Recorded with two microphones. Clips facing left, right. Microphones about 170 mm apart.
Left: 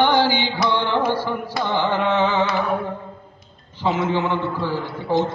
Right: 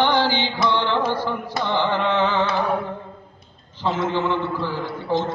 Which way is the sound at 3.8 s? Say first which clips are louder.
Left 1 dB; 10° left (ahead or behind).